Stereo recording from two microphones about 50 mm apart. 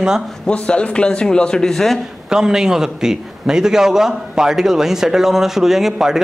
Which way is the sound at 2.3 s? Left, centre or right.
Centre.